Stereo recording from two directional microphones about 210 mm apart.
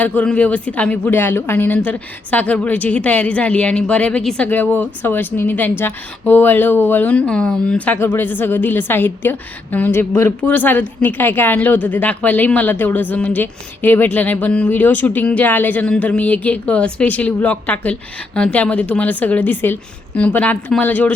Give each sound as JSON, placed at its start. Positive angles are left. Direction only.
{"t": 0.0, "sound": "a woman's voice", "side_deg": 5}